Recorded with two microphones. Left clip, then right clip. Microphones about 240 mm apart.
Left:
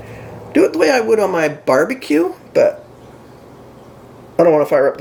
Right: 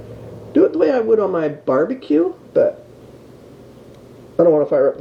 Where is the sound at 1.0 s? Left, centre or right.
Left.